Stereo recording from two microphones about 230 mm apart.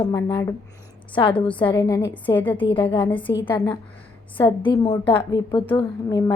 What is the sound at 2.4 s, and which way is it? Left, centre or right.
A woman's voice, left.